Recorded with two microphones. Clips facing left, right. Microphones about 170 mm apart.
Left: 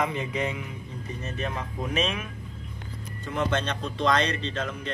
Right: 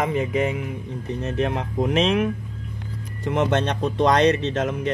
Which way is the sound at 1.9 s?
80° right.